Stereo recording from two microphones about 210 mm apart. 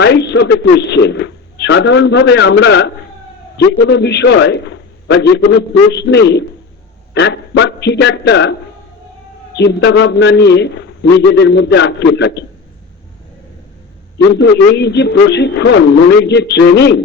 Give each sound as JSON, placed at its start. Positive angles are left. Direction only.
{"t": 0.0, "sound": "a man's voice", "side_deg": 55}
{"t": 9.6, "sound": "a man's voice", "side_deg": 55}
{"t": 14.3, "sound": "a man's voice", "side_deg": 55}